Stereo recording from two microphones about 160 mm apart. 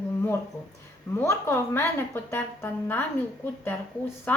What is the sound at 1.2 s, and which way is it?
A woman's voice, 15° left (ahead or behind).